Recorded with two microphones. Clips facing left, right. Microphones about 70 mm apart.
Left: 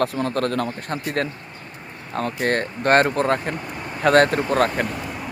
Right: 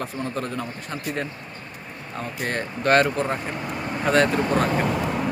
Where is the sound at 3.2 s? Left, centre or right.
Left.